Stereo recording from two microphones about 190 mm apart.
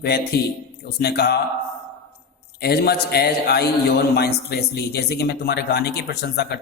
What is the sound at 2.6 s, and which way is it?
A man's voice, 60° left (ahead or behind).